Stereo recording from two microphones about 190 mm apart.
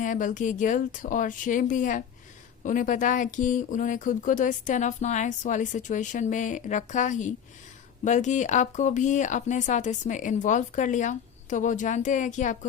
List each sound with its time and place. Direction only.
0.0 s speech: 45° left (ahead or behind)